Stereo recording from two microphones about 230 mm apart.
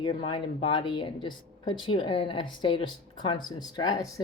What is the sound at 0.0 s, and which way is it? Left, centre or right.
A woman's voice, left.